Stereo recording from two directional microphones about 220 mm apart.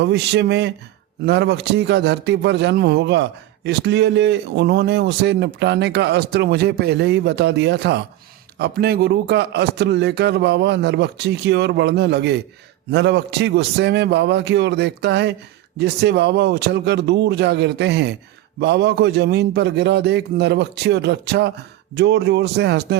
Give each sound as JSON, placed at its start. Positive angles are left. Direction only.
{"t": 0.0, "sound": "a man's voice", "side_deg": -50}